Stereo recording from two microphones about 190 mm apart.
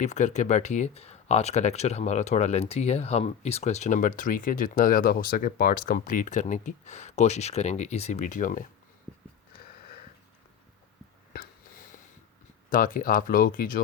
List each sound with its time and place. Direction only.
0.0 s speech: 40° left (ahead or behind)
12.7 s speech: 45° left (ahead or behind)